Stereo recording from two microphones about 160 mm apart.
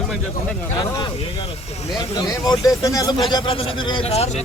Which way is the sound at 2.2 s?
20° left (ahead or behind).